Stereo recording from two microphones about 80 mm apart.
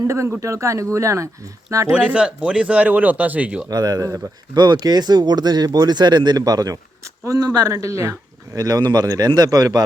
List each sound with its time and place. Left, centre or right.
0.1 s speech: right
2.0 s speech: centre
3.7 s speech: right
4.5 s speech: right
8.5 s speech: right